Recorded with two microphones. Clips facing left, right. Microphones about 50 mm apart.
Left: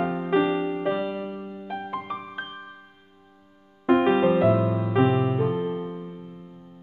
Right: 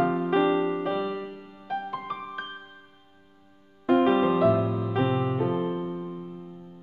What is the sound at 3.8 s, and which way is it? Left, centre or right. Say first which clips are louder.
Music: left 2 dB; centre.